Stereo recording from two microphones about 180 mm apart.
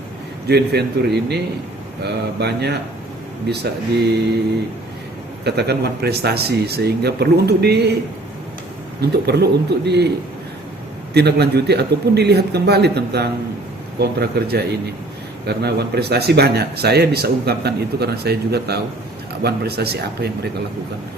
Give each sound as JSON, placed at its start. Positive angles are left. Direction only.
{"t": 0.4, "sound": "speech", "side_deg": -65}
{"t": 2.4, "sound": "a man's voice", "side_deg": -65}
{"t": 5.5, "sound": "speech", "side_deg": -65}
{"t": 9.0, "sound": "a man's voice", "side_deg": -65}
{"t": 11.1, "sound": "a man's voice", "side_deg": -65}